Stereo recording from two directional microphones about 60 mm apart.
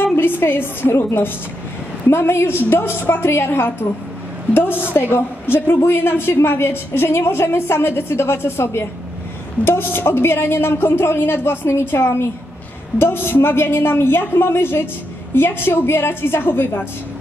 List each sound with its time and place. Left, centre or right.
0.0 s a woman's voice: left
4.9 s a woman's voice: left